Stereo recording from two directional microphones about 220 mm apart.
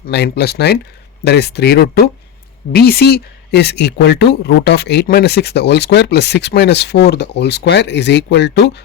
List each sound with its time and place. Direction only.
0.1 s speech: 50° left (ahead or behind)